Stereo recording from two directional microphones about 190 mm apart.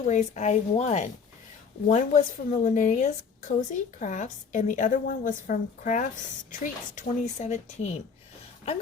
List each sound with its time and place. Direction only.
0.0 s speech: 40° left (ahead or behind)